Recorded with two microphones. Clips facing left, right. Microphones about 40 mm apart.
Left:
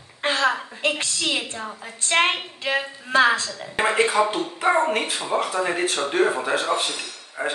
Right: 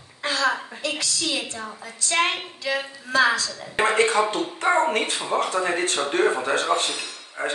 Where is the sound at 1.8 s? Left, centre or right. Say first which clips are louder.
Left 2 dB; left.